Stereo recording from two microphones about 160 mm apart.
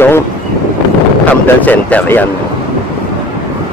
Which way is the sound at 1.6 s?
10° left (ahead or behind).